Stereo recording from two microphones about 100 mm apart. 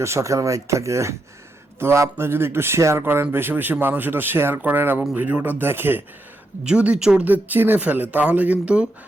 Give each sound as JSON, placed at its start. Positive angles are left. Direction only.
{"t": 0.0, "sound": "speech", "side_deg": -30}
{"t": 6.7, "sound": "speech", "side_deg": -10}